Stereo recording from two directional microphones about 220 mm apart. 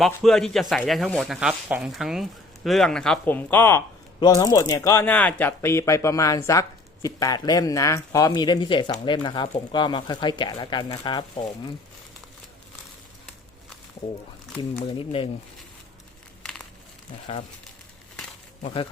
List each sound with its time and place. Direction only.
0.0 s speech: centre (ahead or behind); by 11.4 s 20° left (ahead or behind)
14.8 s speech: 25° left (ahead or behind)
16.4 s a sound: 5° left (ahead or behind)
18.6 s speech: 25° left (ahead or behind)